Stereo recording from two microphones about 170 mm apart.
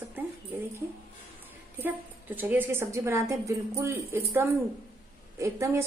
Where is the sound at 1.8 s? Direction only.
10° right (ahead or behind).